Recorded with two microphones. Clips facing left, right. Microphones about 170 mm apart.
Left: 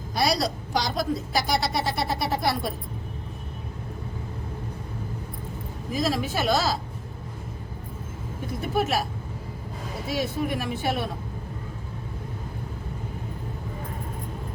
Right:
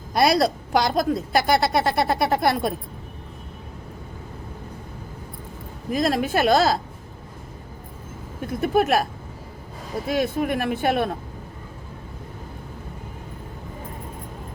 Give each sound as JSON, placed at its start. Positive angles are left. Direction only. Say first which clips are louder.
{"t": 0.1, "sound": "a woman's voice", "louder": "right 6 dB", "side_deg": -60}
{"t": 5.9, "sound": "a woman's voice", "louder": "right 5 dB", "side_deg": -55}
{"t": 8.4, "sound": "a woman's voice", "louder": "right 6 dB", "side_deg": -55}
{"t": 10.1, "sound": "a woman's voice", "louder": "right 4 dB", "side_deg": -55}